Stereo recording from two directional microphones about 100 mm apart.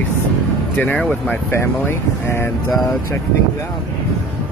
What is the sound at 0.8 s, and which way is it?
Speech, 15° left (ahead or behind).